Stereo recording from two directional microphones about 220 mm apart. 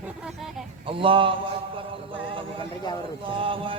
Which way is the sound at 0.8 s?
25° right (ahead or behind).